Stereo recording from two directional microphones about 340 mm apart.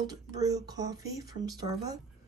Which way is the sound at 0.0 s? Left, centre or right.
Centre.